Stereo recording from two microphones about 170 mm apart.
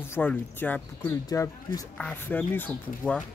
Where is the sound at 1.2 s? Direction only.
20° left (ahead or behind).